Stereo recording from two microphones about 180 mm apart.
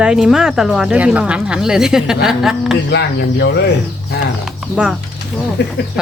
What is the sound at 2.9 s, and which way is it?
Speech, 70° left (ahead or behind).